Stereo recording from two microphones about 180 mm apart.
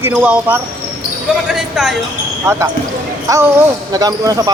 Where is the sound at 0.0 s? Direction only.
10° right (ahead or behind).